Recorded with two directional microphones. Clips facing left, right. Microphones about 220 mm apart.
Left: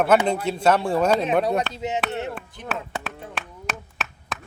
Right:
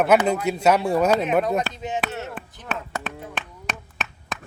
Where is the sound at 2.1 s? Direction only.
20° left (ahead or behind).